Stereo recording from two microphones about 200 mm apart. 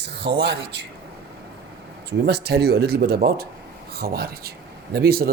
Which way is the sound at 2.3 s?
55° right (ahead or behind).